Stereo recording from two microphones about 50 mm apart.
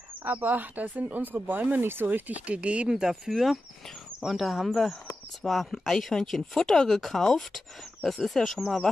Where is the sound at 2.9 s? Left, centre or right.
Centre.